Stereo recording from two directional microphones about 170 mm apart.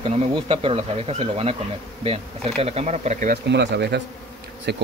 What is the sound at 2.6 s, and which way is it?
Speech, 35° right (ahead or behind).